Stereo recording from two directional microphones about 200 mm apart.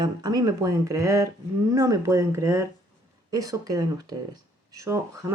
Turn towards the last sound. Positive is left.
turn(degrees=-15)  # may be behind; listen again after turning